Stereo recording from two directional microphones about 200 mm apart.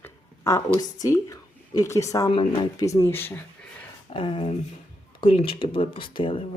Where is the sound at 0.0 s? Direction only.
15° left (ahead or behind).